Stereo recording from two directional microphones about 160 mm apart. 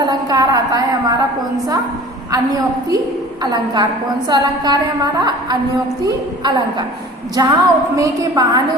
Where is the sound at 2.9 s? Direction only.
25° right (ahead or behind).